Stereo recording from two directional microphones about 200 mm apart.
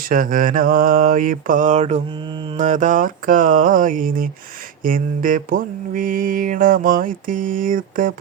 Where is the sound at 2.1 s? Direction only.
25° right (ahead or behind).